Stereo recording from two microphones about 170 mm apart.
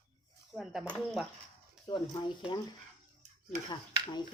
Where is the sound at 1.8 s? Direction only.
25° left (ahead or behind).